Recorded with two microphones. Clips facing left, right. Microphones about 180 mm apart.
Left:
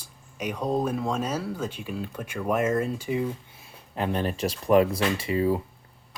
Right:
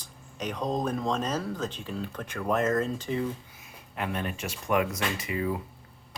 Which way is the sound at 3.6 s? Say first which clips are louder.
Left 5 dB; 30° left (ahead or behind).